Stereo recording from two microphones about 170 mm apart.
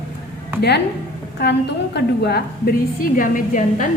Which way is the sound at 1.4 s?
75° left (ahead or behind).